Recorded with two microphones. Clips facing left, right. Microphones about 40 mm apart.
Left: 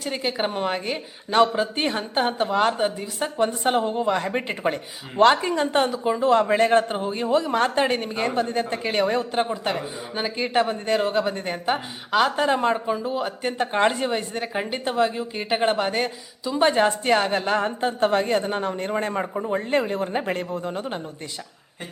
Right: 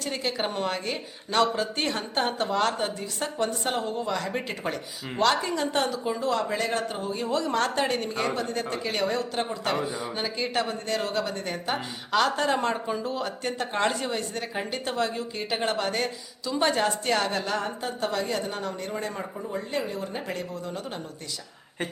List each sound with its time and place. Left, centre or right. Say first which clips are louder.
0.0 s speech: left 3 dB; centre